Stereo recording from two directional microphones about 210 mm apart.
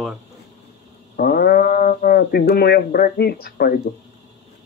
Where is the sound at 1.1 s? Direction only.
45° left (ahead or behind).